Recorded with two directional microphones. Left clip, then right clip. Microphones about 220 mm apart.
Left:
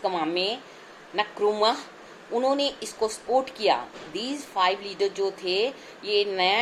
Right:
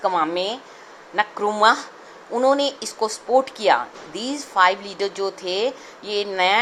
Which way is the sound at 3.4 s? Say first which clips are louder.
Right 5 dB; 50° right (ahead or behind).